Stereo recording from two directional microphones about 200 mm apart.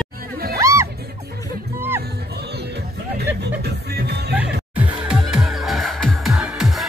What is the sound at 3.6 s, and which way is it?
Music, 55° right (ahead or behind).